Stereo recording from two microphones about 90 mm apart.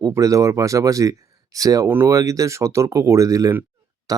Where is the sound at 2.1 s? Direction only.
40° right (ahead or behind).